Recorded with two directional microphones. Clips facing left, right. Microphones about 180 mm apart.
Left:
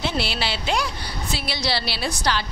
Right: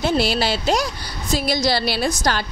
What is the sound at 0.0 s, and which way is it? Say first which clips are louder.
A woman's voice: right 6 dB; 40° right (ahead or behind).